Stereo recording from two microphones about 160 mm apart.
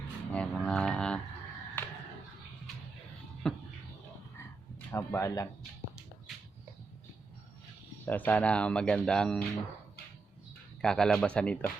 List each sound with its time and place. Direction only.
0.3 s speech: 5° left (ahead or behind)
1.8 s a sound: 10° left (ahead or behind)
3.4 s a sound: 5° left (ahead or behind)
4.9 s speech: 15° left (ahead or behind)
8.0 s speech: 10° left (ahead or behind)
10.8 s speech: 5° left (ahead or behind)